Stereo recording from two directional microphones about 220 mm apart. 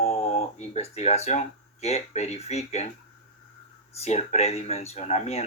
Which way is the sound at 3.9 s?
30° left (ahead or behind).